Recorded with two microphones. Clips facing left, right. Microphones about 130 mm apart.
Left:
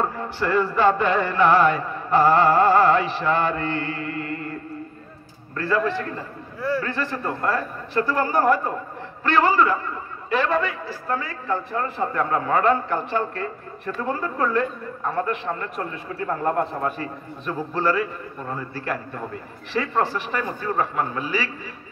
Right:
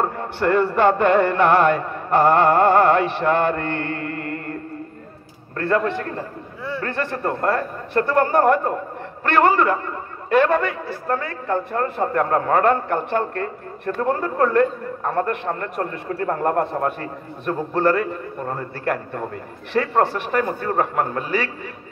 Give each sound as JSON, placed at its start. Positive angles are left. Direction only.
{"t": 0.2, "sound": "a man's voice", "side_deg": -55}
{"t": 5.6, "sound": "a man's voice", "side_deg": -55}